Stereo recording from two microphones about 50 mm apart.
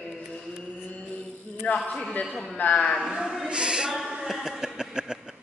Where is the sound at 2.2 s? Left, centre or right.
Centre.